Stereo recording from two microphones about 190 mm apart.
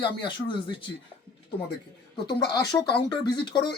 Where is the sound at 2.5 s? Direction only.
20° left (ahead or behind).